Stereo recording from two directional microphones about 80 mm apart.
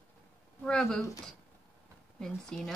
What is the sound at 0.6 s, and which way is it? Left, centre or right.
Speech, centre.